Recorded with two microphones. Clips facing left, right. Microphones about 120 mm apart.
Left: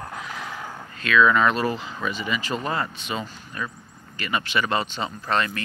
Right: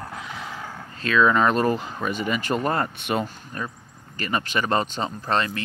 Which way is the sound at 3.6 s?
40° right (ahead or behind).